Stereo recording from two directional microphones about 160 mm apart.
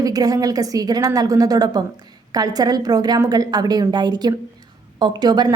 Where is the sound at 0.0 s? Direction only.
25° right (ahead or behind).